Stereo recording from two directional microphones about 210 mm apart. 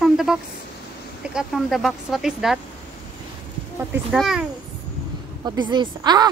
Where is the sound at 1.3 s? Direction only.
Centre (ahead or behind).